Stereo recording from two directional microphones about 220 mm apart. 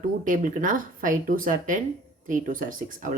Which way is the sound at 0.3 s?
35° right (ahead or behind).